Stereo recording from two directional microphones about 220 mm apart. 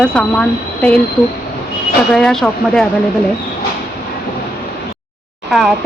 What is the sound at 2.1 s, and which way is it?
Speech, centre (ahead or behind).